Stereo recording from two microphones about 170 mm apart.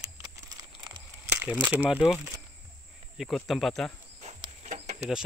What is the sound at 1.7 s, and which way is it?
Speech, 10° right (ahead or behind).